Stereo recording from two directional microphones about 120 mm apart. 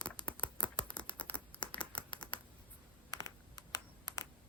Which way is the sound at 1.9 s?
40° left (ahead or behind).